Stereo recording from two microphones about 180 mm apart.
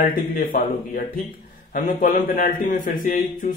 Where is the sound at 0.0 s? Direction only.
55° left (ahead or behind).